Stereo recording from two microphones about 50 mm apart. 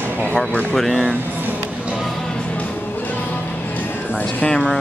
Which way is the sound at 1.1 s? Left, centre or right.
Right.